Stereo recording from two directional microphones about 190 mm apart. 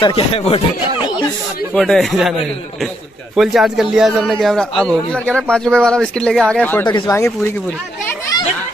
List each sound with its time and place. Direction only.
0.0 s speech: 30° left (ahead or behind)
1.7 s speech: 5° left (ahead or behind)
3.3 s speech: centre (ahead or behind)
6.9 s speech: 20° left (ahead or behind)